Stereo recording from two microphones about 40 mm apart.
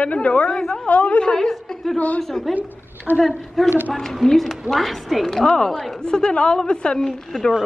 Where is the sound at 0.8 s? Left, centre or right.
Left.